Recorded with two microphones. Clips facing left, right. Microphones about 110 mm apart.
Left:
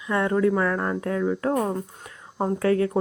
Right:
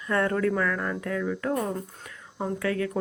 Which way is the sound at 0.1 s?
15° left (ahead or behind).